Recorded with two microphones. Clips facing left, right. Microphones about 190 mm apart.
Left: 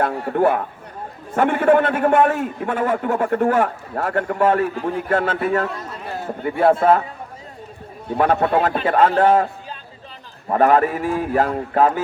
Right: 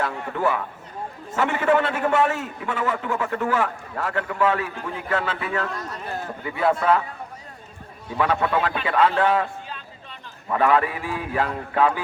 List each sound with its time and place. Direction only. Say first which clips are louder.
0.0 s a sound: left 6 dB; 40° left (ahead or behind)
0.3 s a man's voice: left 7 dB; 55° left (ahead or behind)
8.0 s a man's voice: left 5 dB; 50° left (ahead or behind)